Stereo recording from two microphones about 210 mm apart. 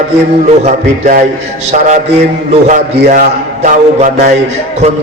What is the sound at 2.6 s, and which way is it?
A man's voice, 35° right (ahead or behind).